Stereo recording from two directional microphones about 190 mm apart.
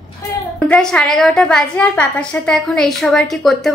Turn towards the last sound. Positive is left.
turn(degrees=0)  # may be behind; listen again after turning